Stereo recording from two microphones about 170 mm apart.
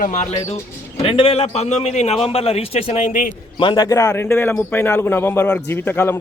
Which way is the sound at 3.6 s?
25° left (ahead or behind).